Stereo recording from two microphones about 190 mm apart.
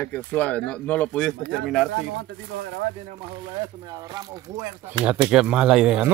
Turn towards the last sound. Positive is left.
turn(degrees=-5)  # may be behind; listen again after turning